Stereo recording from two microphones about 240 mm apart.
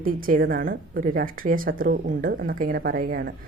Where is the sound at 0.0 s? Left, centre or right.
Right.